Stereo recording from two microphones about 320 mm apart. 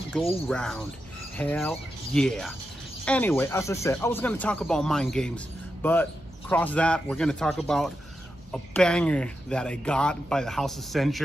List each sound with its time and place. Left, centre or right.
0.1 s speech: centre